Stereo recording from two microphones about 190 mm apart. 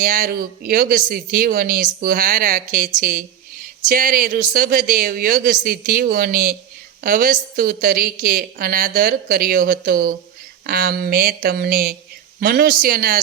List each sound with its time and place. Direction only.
0.0 s speech: 45° right (ahead or behind)